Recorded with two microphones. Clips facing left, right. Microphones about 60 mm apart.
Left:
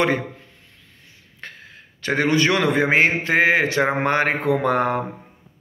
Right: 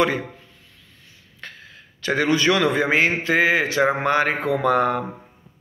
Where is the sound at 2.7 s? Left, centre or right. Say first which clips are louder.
Left 2 dB; left.